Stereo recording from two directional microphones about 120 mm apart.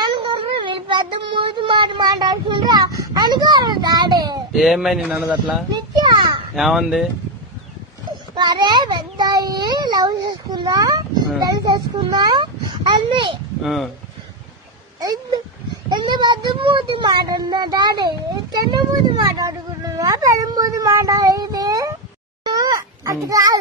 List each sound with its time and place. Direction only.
0.1 s child singing: 45° right (ahead or behind)
4.5 s speech: centre (ahead or behind)
5.7 s a sound: 35° right (ahead or behind)
6.5 s speech: centre (ahead or behind)
8.4 s a child's voice: 35° right (ahead or behind)
13.6 s speech: centre (ahead or behind)
15.9 s speech: 40° right (ahead or behind)
22.4 s a sound: 35° right (ahead or behind)